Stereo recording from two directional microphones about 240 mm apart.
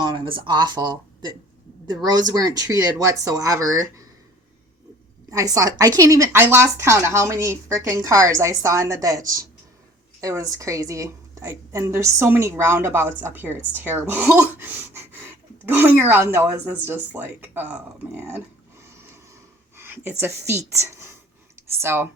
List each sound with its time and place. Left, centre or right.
0.0 s a woman's voice: centre
5.3 s a woman's voice: centre
19.7 s a sound: centre
20.5 s a woman's voice: centre